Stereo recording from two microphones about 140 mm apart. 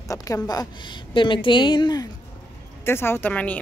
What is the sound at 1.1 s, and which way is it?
Speech, 35° left (ahead or behind).